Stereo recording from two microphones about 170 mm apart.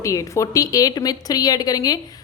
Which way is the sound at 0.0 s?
20° left (ahead or behind).